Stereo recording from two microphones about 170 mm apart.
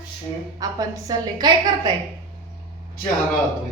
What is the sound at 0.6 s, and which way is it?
A woman's voice, 20° right (ahead or behind).